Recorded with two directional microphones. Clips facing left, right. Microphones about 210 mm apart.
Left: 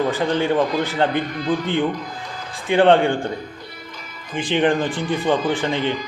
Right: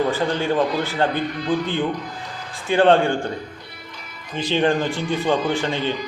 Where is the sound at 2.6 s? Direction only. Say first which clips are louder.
Left 1 dB; 20° left (ahead or behind).